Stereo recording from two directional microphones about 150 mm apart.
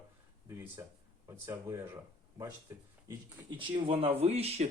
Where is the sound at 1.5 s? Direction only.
15° right (ahead or behind).